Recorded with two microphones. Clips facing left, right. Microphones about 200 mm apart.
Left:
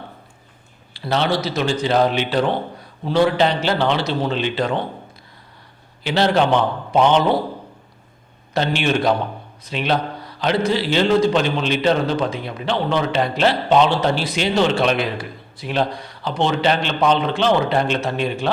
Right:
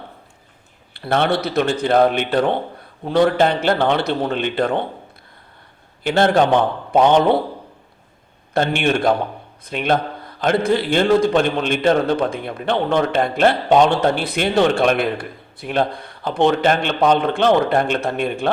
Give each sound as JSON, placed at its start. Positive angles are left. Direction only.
{"t": 0.9, "sound": "a man's voice", "side_deg": -55}
{"t": 6.0, "sound": "a man's voice", "side_deg": -50}
{"t": 8.5, "sound": "a man's voice", "side_deg": -50}